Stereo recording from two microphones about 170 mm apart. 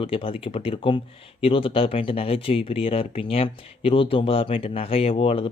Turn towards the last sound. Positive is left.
turn(degrees=35)  # may be behind; listen again after turning